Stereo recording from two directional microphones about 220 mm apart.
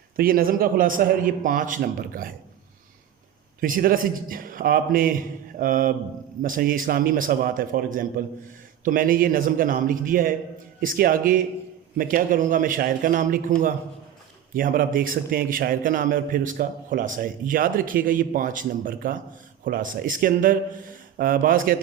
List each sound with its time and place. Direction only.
0.2 s a man's voice: 40° right (ahead or behind)
3.6 s a man's voice: 40° right (ahead or behind)
14.5 s a man's voice: 40° right (ahead or behind)